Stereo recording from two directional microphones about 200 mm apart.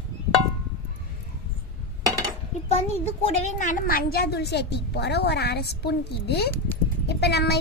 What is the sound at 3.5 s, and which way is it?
A woman's voice, 40° left (ahead or behind).